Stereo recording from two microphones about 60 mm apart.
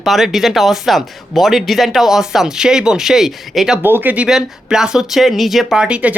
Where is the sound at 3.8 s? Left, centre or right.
Right.